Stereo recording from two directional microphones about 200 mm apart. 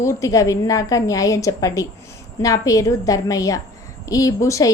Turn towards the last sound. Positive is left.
turn(degrees=15)  # may be behind; listen again after turning